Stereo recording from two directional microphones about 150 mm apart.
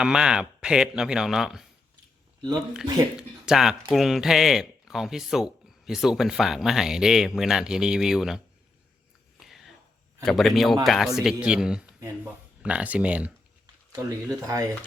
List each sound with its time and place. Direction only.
0.0 s speech: 5° right (ahead or behind)
3.2 s speech: 5° right (ahead or behind)
10.2 s speech: centre (ahead or behind)
11.9 s speech: 20° right (ahead or behind)
13.9 s speech: 25° right (ahead or behind)